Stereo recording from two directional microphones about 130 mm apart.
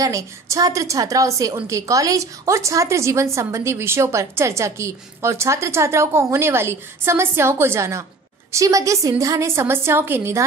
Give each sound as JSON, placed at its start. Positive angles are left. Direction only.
{"t": 0.0, "sound": "a woman's voice", "side_deg": -25}